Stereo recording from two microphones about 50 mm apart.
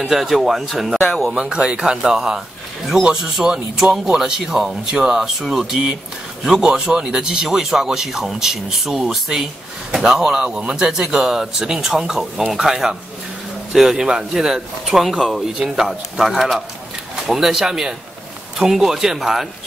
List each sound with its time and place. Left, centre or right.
0.0 s speech: centre
1.3 s speech: centre